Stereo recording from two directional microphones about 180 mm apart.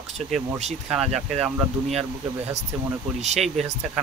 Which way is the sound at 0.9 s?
5° right (ahead or behind).